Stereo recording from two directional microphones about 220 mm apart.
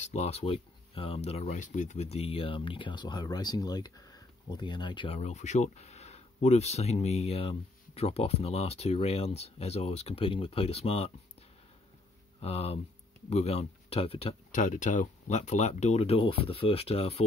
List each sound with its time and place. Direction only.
0.0 s speech: 30° left (ahead or behind)
12.4 s speech: 25° left (ahead or behind)